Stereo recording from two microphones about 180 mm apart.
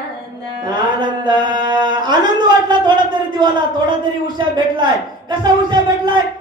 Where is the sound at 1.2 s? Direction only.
25° right (ahead or behind).